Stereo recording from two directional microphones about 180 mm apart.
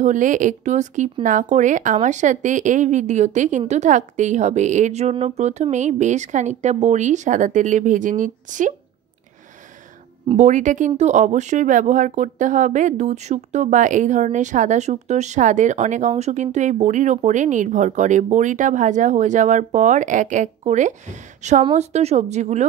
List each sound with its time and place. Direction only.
0.0 s a woman's voice: 45° right (ahead or behind)
10.2 s a woman's voice: 40° right (ahead or behind)